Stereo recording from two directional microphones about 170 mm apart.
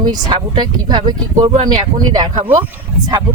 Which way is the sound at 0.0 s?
25° right (ahead or behind).